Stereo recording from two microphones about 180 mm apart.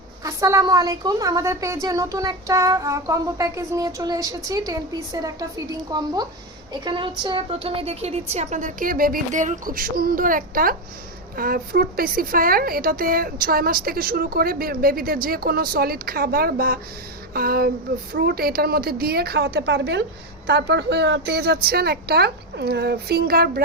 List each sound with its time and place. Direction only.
0.2 s a woman's voice: 15° right (ahead or behind); by 23.6 s 60° right (ahead or behind)